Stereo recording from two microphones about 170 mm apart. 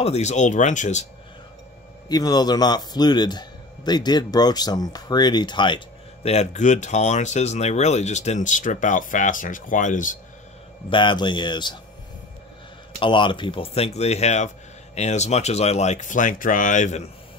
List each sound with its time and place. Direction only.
0.0 s speech: 40° left (ahead or behind)
2.0 s speech: 25° left (ahead or behind)
6.2 s speech: 40° left (ahead or behind)
10.9 s speech: 30° left (ahead or behind)
13.0 s speech: 30° left (ahead or behind)